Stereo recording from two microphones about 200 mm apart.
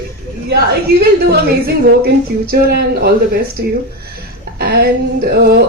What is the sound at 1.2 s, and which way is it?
A woman's voice, 50° right (ahead or behind).